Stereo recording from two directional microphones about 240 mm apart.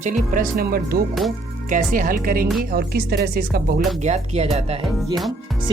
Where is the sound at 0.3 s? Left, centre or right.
Right.